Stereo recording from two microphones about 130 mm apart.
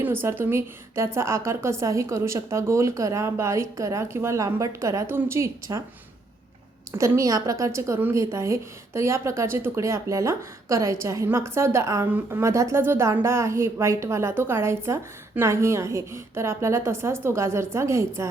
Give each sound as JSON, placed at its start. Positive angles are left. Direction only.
{"t": 0.0, "sound": "a woman's voice", "side_deg": -15}
{"t": 6.9, "sound": "a woman's voice", "side_deg": -20}